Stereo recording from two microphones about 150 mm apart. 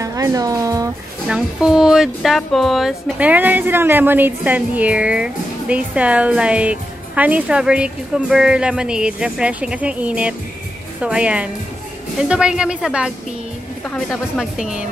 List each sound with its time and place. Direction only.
0.0 s speech: 20° right (ahead or behind)
1.2 s speech: 5° right (ahead or behind)
13.8 s speech: 5° left (ahead or behind)